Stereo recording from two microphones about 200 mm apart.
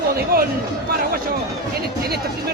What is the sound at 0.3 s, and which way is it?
Speech, 45° right (ahead or behind).